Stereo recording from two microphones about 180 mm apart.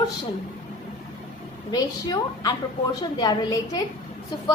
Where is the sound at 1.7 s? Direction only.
20° left (ahead or behind).